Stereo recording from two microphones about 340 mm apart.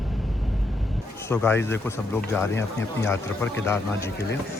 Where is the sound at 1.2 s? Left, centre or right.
Centre.